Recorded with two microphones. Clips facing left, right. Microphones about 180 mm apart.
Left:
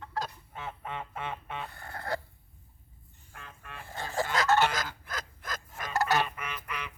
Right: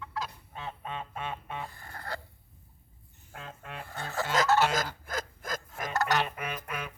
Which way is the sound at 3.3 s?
75° right (ahead or behind).